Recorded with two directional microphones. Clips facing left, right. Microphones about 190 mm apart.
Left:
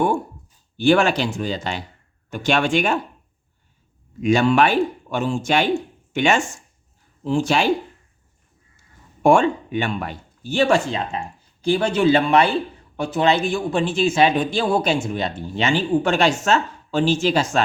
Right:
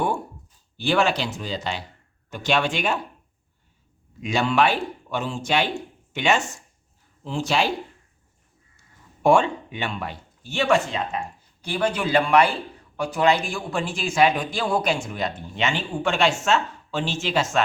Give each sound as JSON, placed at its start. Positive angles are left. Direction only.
{"t": 0.9, "sound": "speech", "side_deg": 50}
{"t": 4.2, "sound": "speech", "side_deg": 50}
{"t": 9.2, "sound": "speech", "side_deg": 50}